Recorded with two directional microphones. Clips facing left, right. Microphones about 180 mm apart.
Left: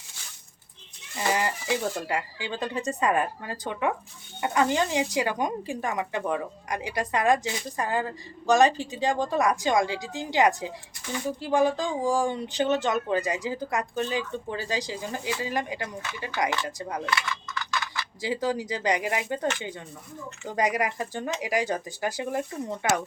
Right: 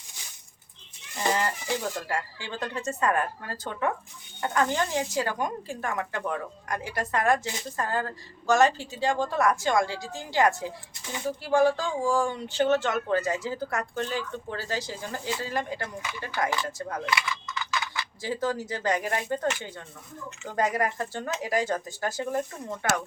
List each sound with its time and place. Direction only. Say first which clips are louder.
1.1 s speech: even; 10° left (ahead or behind)
18.2 s speech: left 2 dB; 15° left (ahead or behind)
20.5 s speech: even; 15° left (ahead or behind)